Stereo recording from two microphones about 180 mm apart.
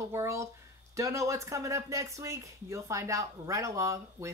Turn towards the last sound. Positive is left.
turn(degrees=-15)  # may be behind; listen again after turning